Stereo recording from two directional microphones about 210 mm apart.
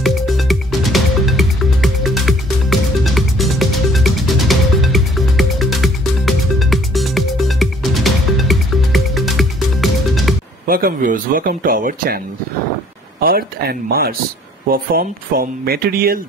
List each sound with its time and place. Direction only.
0.0 s music: centre (ahead or behind)
10.7 s speech: 45° right (ahead or behind)
13.2 s speech: 45° right (ahead or behind)